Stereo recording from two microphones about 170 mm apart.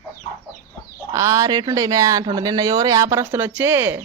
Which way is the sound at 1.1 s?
20° right (ahead or behind).